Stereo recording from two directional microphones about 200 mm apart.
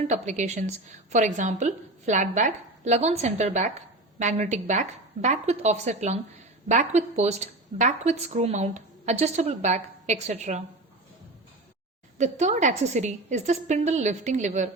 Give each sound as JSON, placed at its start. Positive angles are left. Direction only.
{"t": 0.1, "sound": "a woman's voice", "side_deg": -35}
{"t": 12.1, "sound": "a woman's voice", "side_deg": -35}